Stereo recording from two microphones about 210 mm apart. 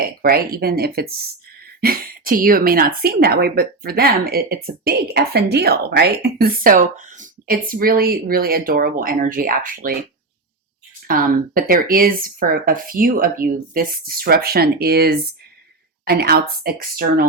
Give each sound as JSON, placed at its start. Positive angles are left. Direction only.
{"t": 0.2, "sound": "a woman's voice", "side_deg": -45}
{"t": 11.1, "sound": "a woman's voice", "side_deg": -40}